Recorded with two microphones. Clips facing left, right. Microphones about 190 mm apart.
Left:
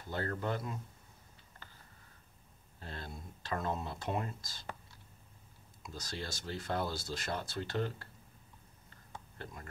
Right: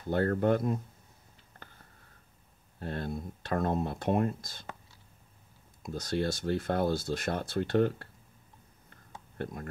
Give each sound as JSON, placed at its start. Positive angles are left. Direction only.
{"t": 0.1, "sound": "speech", "side_deg": -55}
{"t": 2.8, "sound": "speech", "side_deg": -55}
{"t": 5.8, "sound": "speech", "side_deg": -55}
{"t": 9.4, "sound": "speech", "side_deg": -50}